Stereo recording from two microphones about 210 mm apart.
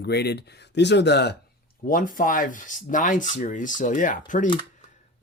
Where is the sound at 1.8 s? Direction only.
40° left (ahead or behind).